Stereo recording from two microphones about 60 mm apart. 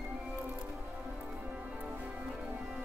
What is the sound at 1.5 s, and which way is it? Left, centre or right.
Music, right.